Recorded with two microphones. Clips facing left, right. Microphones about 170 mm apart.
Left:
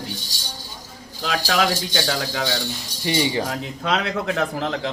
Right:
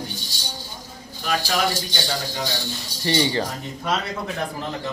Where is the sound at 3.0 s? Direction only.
10° left (ahead or behind).